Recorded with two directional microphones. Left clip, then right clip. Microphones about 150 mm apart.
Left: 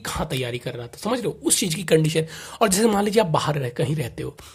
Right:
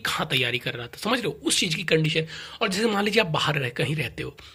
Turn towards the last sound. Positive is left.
turn(degrees=35)  # may be behind; listen again after turning